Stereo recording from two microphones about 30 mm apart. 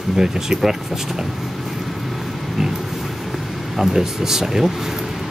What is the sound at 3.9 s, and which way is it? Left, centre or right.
Speech, centre.